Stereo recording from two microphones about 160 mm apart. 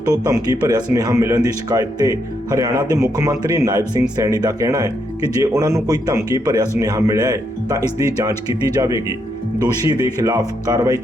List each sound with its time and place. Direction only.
0.3 s speech: 25° right (ahead or behind)